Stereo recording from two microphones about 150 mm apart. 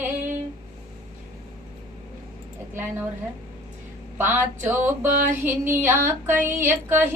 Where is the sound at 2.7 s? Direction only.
15° right (ahead or behind).